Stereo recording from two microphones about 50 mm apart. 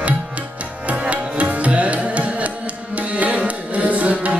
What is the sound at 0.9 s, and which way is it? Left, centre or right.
Music, right.